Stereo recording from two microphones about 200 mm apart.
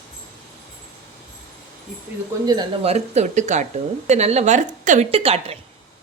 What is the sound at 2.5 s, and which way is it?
Speech, 20° right (ahead or behind).